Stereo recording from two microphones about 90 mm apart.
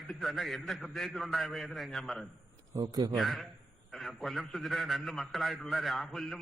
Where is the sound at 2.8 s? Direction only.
55° right (ahead or behind).